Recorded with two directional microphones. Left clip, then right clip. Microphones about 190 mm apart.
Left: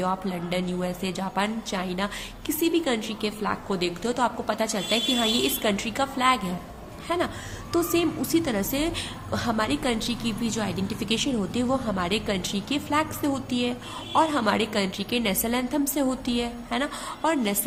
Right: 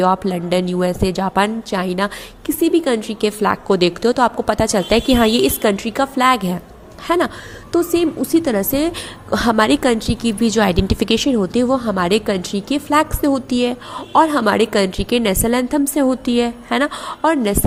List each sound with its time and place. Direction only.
0.0 s a woman's voice: 40° right (ahead or behind)
7.7 s a woman's voice: 30° right (ahead or behind)